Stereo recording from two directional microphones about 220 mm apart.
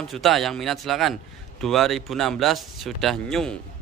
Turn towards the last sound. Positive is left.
turn(degrees=0)  # may be behind; listen again after turning